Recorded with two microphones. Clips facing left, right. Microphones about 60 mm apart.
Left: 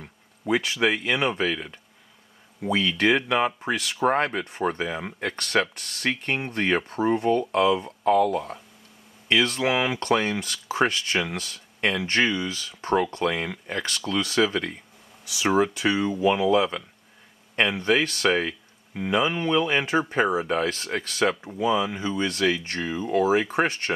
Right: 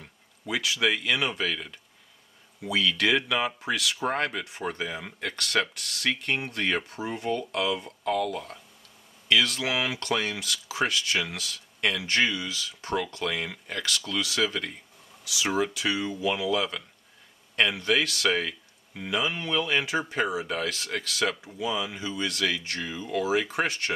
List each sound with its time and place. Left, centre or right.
0.5 s speech: left